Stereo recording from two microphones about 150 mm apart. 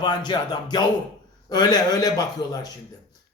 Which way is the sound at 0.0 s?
30° left (ahead or behind).